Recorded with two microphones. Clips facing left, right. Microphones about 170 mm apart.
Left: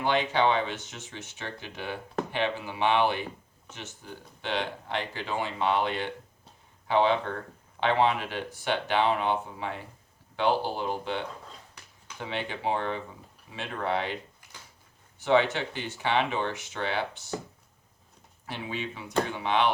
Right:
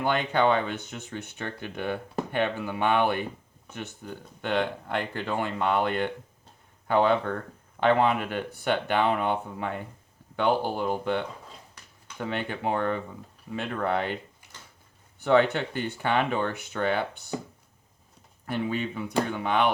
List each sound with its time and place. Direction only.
0.0 s speech: 50° right (ahead or behind)
12.2 s speech: 50° right (ahead or behind)
15.2 s speech: 55° right (ahead or behind)
17.3 s speech: 10° right (ahead or behind)
18.4 s speech: 50° right (ahead or behind)